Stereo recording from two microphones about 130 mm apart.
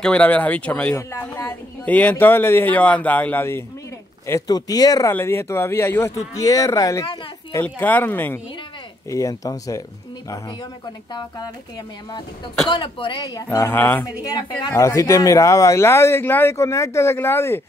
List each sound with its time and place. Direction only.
0.0 s speech: 10° left (ahead or behind)
0.9 s speech: 20° left (ahead or behind)
4.3 s speech: 30° left (ahead or behind)
7.6 s speech: 15° left (ahead or behind)
11.1 s speech: 30° left (ahead or behind)
12.6 s speech: 35° left (ahead or behind); by 14.0 s 15° left (ahead or behind)
14.2 s speech: 30° left (ahead or behind)